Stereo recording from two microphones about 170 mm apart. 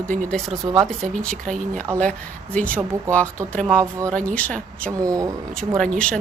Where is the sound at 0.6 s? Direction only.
20° right (ahead or behind).